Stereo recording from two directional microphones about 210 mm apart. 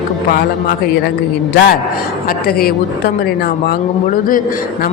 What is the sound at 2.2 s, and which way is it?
A woman's voice, 45° left (ahead or behind).